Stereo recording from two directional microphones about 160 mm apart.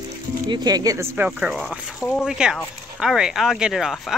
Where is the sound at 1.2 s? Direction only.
5° right (ahead or behind).